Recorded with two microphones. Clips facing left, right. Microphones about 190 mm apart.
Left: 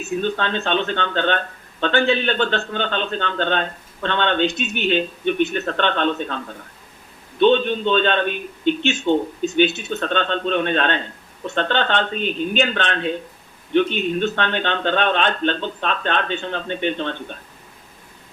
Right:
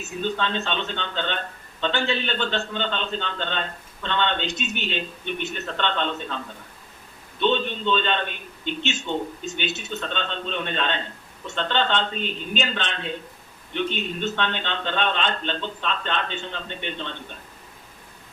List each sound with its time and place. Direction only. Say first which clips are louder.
0.3 s a man's voice: left 5 dB; 60° left (ahead or behind)